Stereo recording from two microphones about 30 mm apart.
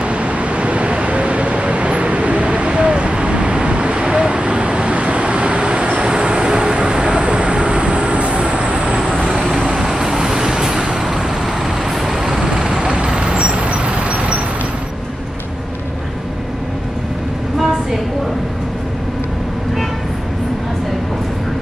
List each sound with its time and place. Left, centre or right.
0.0 s vehicle: right
8.9 s vehicle: right
12.4 s vehicle: right
13.4 s vehicle: right